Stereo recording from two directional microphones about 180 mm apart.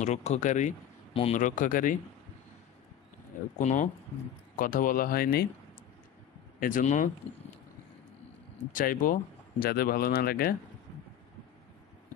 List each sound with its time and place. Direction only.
0.0 s speech: 40° left (ahead or behind)
3.5 s speech: 45° left (ahead or behind)
6.6 s speech: 45° left (ahead or behind)
8.7 s speech: 50° left (ahead or behind)